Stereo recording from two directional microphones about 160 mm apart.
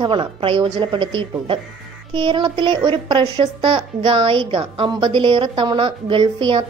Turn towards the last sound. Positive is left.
turn(degrees=-30)  # may be behind; listen again after turning